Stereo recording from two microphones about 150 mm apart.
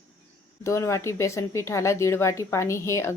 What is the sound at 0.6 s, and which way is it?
Speech, 20° left (ahead or behind).